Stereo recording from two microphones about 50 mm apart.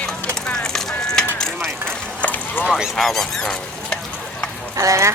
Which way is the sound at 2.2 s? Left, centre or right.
Left.